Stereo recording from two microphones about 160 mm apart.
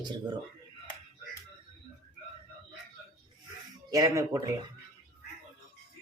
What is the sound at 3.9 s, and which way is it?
Speech, 25° right (ahead or behind).